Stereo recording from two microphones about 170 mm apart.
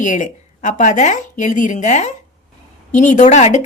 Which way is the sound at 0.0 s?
45° left (ahead or behind).